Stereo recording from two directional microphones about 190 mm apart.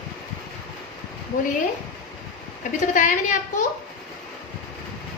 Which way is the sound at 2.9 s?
40° left (ahead or behind).